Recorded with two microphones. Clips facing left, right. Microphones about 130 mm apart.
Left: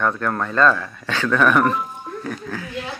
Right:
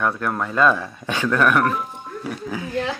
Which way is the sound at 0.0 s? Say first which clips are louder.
Left 1 dB; 10° right (ahead or behind).